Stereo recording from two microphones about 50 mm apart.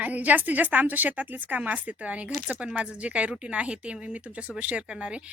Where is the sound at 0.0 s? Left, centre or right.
Right.